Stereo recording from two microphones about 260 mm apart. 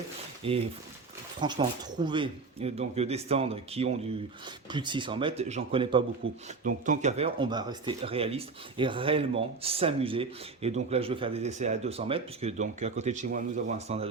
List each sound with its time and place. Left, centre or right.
0.4 s speech: right